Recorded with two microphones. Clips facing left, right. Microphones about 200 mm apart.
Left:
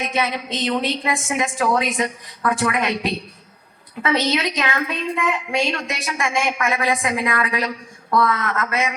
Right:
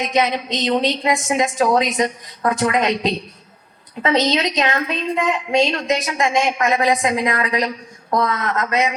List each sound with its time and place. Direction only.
0.0 s a woman's voice: 20° right (ahead or behind)